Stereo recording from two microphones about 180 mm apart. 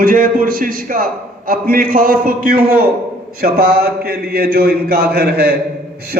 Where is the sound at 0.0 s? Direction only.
50° right (ahead or behind).